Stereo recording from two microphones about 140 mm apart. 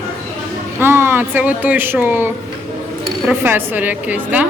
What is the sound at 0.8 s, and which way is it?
Speech, 15° right (ahead or behind).